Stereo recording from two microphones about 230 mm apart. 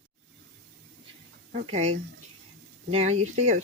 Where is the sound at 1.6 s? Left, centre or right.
Right.